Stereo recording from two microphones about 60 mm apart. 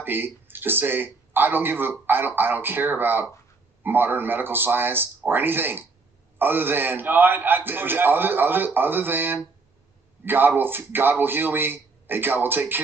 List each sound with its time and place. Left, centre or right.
0.0 s a man's voice: right